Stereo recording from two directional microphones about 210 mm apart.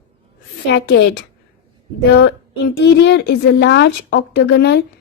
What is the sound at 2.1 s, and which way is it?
A woman's voice, 60° left (ahead or behind).